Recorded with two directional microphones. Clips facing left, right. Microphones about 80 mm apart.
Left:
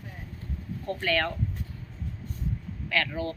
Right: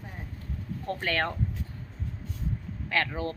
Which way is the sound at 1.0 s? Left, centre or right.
Right.